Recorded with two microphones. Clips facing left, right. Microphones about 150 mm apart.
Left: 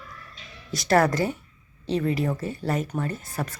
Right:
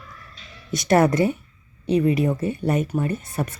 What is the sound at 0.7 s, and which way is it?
Speech, 20° right (ahead or behind).